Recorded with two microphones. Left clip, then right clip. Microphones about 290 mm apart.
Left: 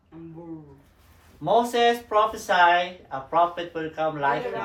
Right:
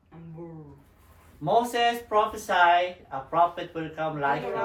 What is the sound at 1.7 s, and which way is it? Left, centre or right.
Speech, left.